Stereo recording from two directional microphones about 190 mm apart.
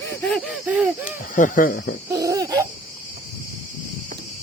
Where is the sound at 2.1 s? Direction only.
15° right (ahead or behind).